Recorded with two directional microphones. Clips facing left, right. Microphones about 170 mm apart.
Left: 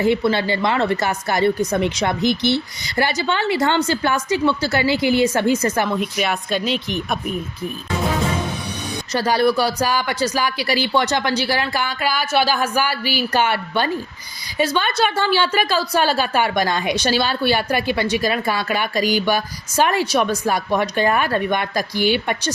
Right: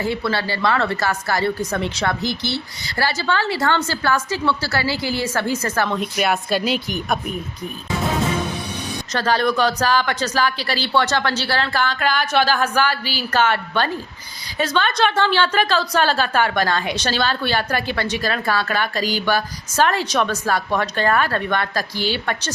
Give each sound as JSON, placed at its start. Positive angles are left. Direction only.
{"t": 0.0, "sound": "a woman's voice", "side_deg": 20}
{"t": 6.0, "sound": "speech", "side_deg": 0}
{"t": 9.1, "sound": "a woman's voice", "side_deg": 10}